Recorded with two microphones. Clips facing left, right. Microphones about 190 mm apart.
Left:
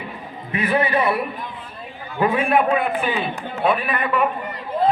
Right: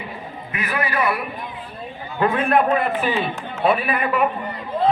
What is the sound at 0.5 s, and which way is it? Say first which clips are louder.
Speech: left 5 dB; 30° left (ahead or behind).